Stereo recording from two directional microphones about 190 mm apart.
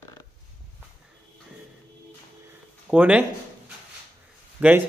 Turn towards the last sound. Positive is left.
turn(degrees=-10)  # may be behind; listen again after turning